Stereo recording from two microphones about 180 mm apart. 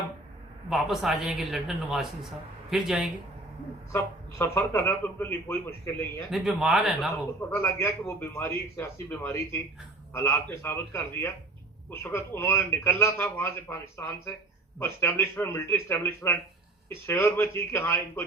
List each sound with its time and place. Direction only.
0.7 s a man's voice: centre (ahead or behind)
3.9 s a man's voice: 10° left (ahead or behind)
6.3 s speech: centre (ahead or behind)
7.5 s a man's voice: 15° left (ahead or behind)